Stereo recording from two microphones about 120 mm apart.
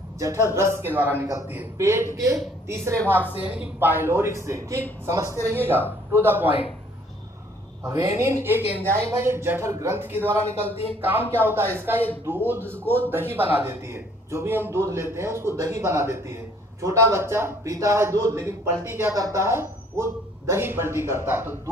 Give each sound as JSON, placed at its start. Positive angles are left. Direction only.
{"t": 0.2, "sound": "speech", "side_deg": -25}
{"t": 7.8, "sound": "speech", "side_deg": -25}